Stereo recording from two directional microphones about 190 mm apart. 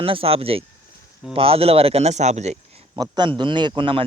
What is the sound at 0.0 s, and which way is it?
Speech, 30° right (ahead or behind).